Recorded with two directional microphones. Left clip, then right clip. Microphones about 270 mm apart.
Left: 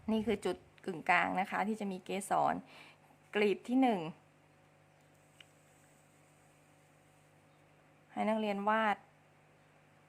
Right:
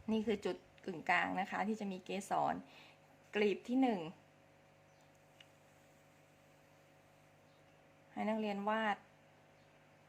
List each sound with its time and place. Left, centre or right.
0.0 s a woman's voice: centre
8.1 s a woman's voice: centre